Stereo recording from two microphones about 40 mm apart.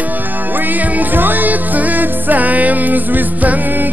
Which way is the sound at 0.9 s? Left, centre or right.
Right.